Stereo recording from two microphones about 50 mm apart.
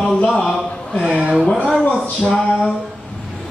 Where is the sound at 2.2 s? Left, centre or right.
Centre.